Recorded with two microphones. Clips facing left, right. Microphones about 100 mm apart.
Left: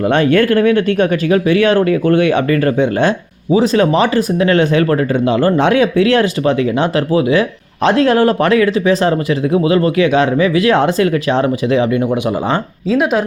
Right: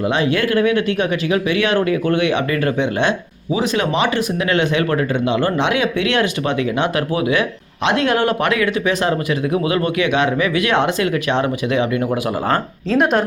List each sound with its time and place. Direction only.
0.1 s speech: 50° left (ahead or behind); by 12.0 s 35° left (ahead or behind)
12.9 s speech: 5° left (ahead or behind)